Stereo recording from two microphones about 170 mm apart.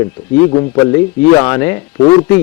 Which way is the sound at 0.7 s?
25° left (ahead or behind).